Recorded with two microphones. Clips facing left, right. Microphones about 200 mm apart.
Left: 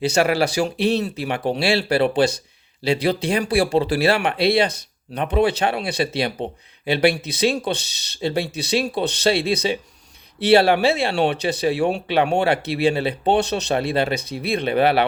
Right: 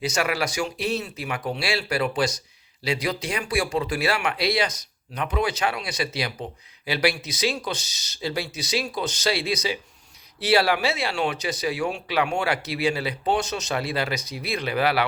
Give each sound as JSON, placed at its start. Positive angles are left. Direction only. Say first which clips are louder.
{"t": 0.0, "sound": "speech", "louder": "left 7 dB", "side_deg": 30}